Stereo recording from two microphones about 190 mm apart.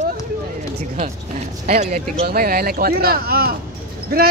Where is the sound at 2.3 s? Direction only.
55° right (ahead or behind).